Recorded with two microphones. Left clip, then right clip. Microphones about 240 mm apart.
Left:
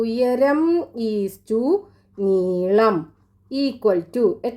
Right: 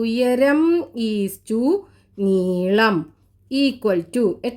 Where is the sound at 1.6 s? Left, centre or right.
Right.